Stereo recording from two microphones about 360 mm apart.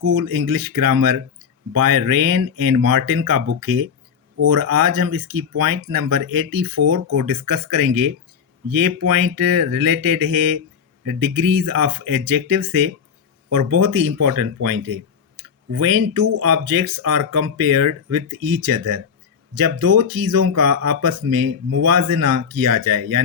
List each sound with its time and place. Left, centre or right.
0.2 s speech: right